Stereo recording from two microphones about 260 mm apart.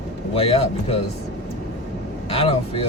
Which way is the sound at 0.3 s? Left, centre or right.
Left.